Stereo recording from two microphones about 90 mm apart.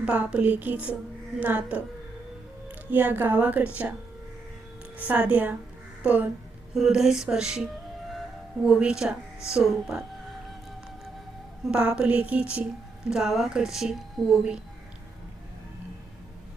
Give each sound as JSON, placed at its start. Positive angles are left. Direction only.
{"t": 0.0, "sound": "a woman's voice", "side_deg": -10}
{"t": 2.9, "sound": "a woman's voice", "side_deg": -20}
{"t": 4.9, "sound": "a woman's voice", "side_deg": -15}
{"t": 6.0, "sound": "music", "side_deg": -15}
{"t": 6.7, "sound": "a woman's voice", "side_deg": -5}
{"t": 11.6, "sound": "a woman's voice", "side_deg": -10}